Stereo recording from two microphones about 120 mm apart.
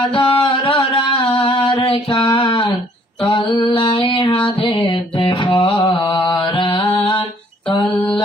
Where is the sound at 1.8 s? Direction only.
50° left (ahead or behind).